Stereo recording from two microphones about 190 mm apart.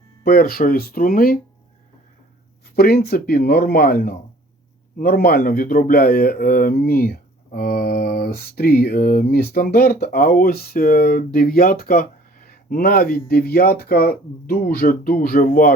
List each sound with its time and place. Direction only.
0.3 s speech: 55° left (ahead or behind)
2.7 s speech: 55° left (ahead or behind)